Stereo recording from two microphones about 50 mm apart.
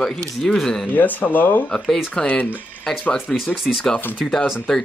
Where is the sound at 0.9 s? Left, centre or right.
Left.